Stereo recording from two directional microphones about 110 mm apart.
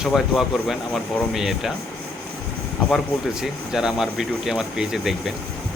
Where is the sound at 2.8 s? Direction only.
5° right (ahead or behind).